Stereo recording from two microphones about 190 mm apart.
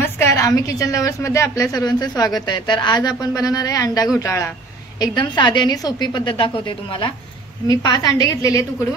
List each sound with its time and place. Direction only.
0.0 s a woman's voice: 15° left (ahead or behind)